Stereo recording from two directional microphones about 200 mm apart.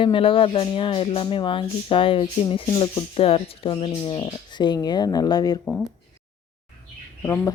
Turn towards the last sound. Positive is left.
turn(degrees=10)  # may be behind; listen again after turning